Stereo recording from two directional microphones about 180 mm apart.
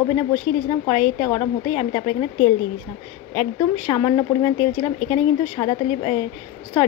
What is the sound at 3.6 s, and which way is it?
Speech, 25° left (ahead or behind).